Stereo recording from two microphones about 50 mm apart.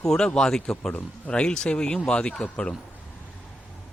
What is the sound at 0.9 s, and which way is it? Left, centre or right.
Speech, left.